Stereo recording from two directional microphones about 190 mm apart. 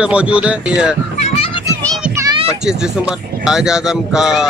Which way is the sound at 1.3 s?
30° left (ahead or behind).